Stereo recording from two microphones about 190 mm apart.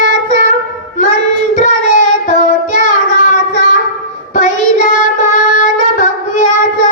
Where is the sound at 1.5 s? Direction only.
40° left (ahead or behind).